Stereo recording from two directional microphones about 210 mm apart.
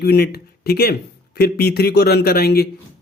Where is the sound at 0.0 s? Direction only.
50° left (ahead or behind).